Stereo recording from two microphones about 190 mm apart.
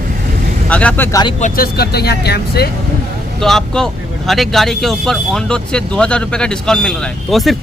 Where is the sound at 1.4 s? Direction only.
50° left (ahead or behind).